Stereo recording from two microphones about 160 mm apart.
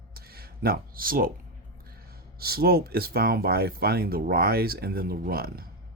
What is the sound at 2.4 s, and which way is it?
Speech, 70° right (ahead or behind).